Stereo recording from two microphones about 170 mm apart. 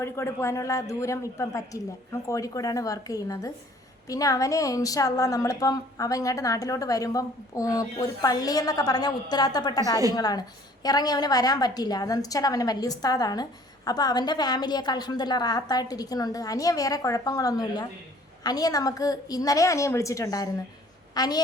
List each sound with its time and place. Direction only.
0.0 s a woman's voice: 15° left (ahead or behind)